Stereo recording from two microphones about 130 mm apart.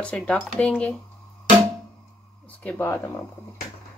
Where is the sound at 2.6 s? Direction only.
15° left (ahead or behind).